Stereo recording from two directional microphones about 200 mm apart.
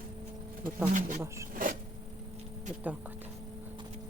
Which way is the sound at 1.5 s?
45° right (ahead or behind).